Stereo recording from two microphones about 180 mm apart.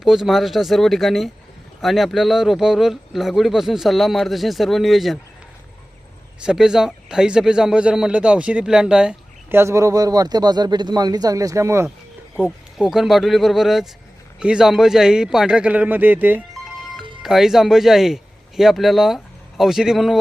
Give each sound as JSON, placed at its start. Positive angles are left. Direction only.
{"t": 0.0, "sound": "speech", "side_deg": 0}
{"t": 6.4, "sound": "a man's voice", "side_deg": -5}
{"t": 12.4, "sound": "speech", "side_deg": -5}